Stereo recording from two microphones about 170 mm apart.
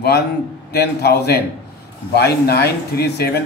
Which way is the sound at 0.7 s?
75° left (ahead or behind).